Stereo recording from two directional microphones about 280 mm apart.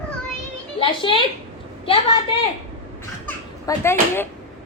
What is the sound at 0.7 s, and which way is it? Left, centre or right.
Speech, centre.